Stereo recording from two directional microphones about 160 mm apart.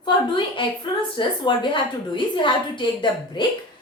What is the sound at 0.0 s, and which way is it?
A woman's voice, 30° left (ahead or behind).